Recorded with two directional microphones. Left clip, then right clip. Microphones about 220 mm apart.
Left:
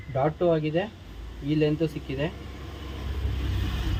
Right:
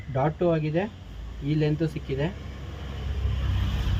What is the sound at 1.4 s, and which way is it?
Speech, 40° left (ahead or behind).